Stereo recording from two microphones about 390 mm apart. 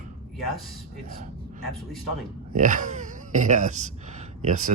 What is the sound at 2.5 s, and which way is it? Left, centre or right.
Speech, centre.